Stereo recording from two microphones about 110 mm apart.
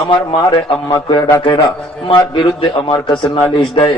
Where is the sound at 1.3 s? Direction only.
50° left (ahead or behind).